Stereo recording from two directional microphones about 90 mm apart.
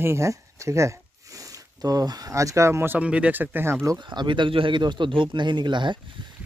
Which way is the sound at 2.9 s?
15° right (ahead or behind).